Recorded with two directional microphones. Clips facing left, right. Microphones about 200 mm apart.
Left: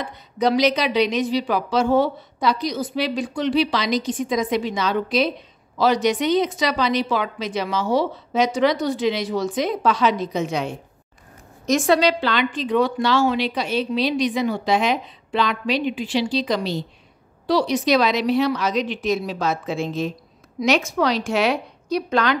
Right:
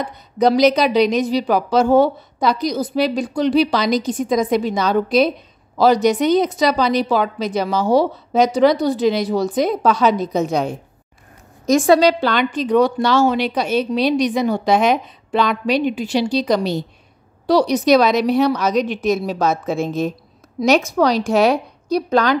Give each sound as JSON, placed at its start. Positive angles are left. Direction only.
{"t": 0.0, "sound": "a woman's voice", "side_deg": -40}
{"t": 12.0, "sound": "a woman's voice", "side_deg": -45}